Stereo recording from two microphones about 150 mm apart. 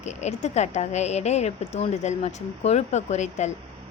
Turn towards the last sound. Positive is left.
turn(degrees=50)  # may be behind; listen again after turning